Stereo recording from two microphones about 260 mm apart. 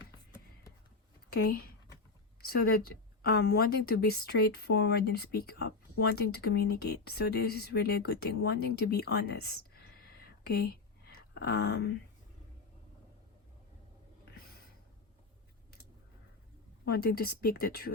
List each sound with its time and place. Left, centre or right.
1.3 s a woman's voice: left
11.1 s a sound: left
16.8 s a woman's voice: left